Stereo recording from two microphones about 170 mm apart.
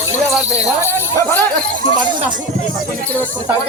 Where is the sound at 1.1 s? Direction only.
10° left (ahead or behind).